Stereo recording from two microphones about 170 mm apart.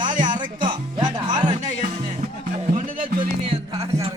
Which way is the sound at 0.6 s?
25° right (ahead or behind).